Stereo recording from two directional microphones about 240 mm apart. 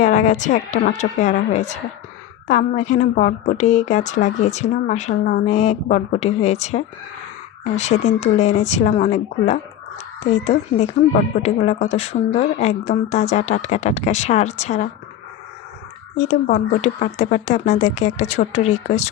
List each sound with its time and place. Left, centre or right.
0.0 s a woman's voice: left
16.1 s a woman's voice: left